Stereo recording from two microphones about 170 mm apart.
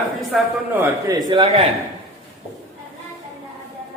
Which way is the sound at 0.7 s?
10° right (ahead or behind).